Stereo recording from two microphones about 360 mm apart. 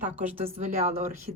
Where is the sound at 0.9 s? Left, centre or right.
Centre.